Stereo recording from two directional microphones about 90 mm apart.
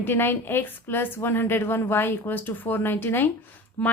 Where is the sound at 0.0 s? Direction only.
25° left (ahead or behind).